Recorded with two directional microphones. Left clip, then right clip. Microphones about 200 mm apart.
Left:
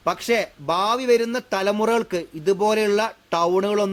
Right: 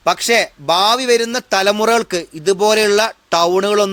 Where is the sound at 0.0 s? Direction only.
15° right (ahead or behind).